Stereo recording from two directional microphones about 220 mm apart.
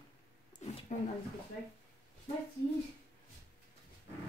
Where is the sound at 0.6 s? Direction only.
30° left (ahead or behind).